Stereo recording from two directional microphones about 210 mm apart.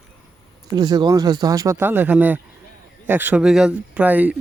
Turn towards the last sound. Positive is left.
turn(degrees=-5)  # may be behind; listen again after turning